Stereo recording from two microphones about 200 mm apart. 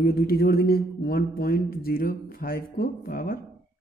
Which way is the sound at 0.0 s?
50° left (ahead or behind).